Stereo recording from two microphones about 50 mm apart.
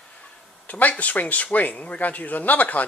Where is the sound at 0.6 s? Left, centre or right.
Left.